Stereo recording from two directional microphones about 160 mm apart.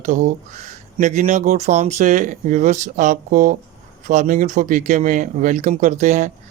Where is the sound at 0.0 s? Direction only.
50° right (ahead or behind).